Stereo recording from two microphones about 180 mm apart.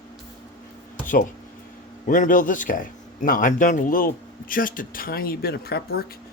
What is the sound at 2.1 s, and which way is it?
Speech, 50° left (ahead or behind).